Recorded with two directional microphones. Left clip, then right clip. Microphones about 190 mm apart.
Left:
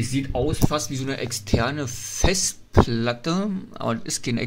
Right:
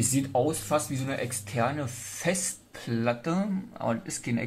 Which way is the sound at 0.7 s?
20° left (ahead or behind).